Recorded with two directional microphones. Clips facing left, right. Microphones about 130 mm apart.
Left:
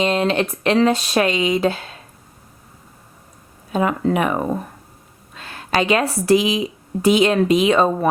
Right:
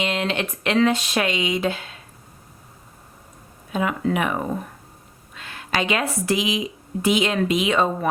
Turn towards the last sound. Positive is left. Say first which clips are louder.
# left 5 dB
turn(degrees=35)  # may be behind; listen again after turning